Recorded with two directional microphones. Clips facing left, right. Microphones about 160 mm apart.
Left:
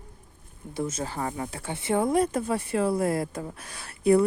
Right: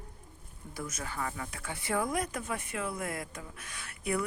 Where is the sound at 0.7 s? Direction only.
25° left (ahead or behind).